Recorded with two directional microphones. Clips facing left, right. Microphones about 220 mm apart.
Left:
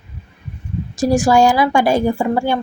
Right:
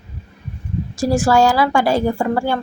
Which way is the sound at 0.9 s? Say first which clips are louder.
Left 2 dB; 15° left (ahead or behind).